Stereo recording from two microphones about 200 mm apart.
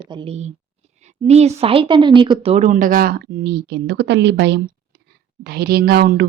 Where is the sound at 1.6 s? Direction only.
25° right (ahead or behind).